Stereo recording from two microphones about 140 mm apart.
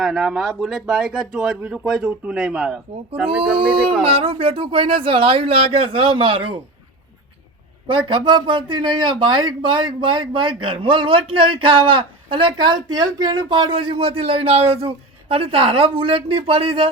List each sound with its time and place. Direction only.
0.0 s speech: centre (ahead or behind)
3.6 s speech: 40° right (ahead or behind)
7.9 s speech: 35° right (ahead or behind)